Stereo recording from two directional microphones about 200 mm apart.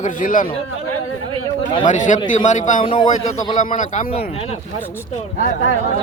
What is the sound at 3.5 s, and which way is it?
Speech, 40° left (ahead or behind).